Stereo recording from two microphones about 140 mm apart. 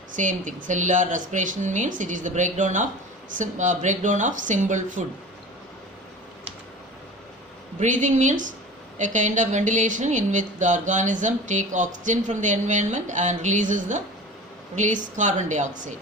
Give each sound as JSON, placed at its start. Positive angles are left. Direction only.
{"t": 0.2, "sound": "speech", "side_deg": -65}
{"t": 7.8, "sound": "speech", "side_deg": -65}